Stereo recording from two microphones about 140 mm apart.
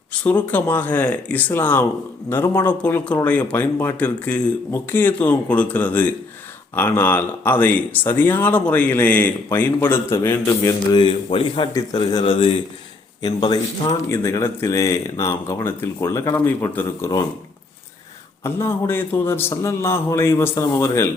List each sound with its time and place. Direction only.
0.1 s speech: 10° left (ahead or behind)
11.0 s a man's voice: 35° left (ahead or behind)
14.1 s speech: 20° left (ahead or behind)
18.4 s speech: 15° left (ahead or behind)